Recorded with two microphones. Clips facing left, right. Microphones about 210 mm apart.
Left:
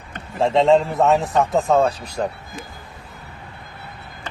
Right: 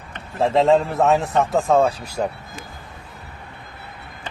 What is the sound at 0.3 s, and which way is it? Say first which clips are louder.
A man's voice: left 1 dB; centre (ahead or behind).